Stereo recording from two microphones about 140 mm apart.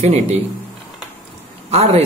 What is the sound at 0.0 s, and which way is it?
Speech, 55° right (ahead or behind).